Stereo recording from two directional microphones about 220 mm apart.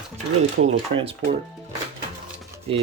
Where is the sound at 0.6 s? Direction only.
55° right (ahead or behind).